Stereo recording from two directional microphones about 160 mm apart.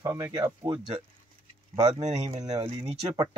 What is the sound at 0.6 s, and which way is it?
Speech, 35° right (ahead or behind).